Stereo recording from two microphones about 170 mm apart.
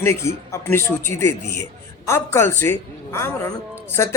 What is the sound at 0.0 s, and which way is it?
A man's voice, 15° left (ahead or behind).